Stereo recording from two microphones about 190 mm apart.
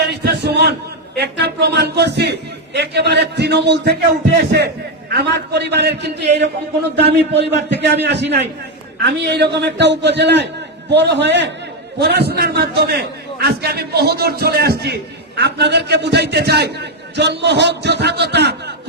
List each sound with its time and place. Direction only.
0.1 s a man's voice: 60° right (ahead or behind)